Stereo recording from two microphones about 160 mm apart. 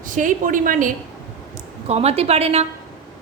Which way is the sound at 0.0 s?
55° right (ahead or behind).